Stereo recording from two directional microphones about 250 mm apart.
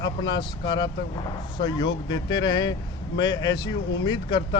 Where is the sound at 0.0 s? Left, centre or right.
Centre.